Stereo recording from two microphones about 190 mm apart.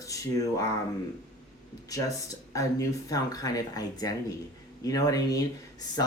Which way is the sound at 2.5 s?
15° left (ahead or behind).